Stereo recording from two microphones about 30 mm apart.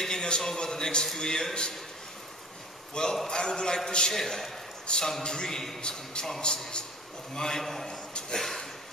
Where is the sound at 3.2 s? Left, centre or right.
Left.